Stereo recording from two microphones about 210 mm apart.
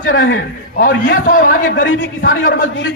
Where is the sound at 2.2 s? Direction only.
45° left (ahead or behind).